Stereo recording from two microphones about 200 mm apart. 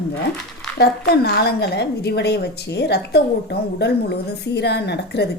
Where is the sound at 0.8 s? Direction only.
55° left (ahead or behind).